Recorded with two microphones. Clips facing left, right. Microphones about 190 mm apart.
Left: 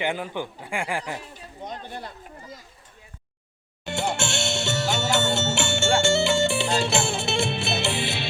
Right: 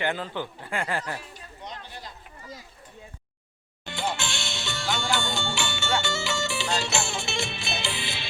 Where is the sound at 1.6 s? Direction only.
50° left (ahead or behind).